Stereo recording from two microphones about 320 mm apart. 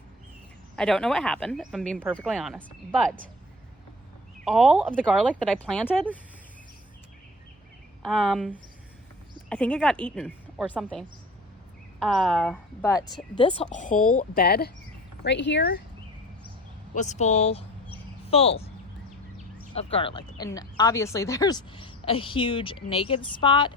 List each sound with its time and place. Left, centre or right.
0.8 s speech: centre
4.4 s speech: centre
8.0 s a woman's voice: centre; by 15.7 s left
16.9 s speech: left
19.7 s a woman's voice: centre